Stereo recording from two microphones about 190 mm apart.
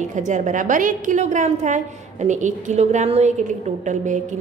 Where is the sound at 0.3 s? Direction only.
40° right (ahead or behind).